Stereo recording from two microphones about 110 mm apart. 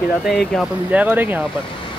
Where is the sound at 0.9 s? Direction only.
15° right (ahead or behind).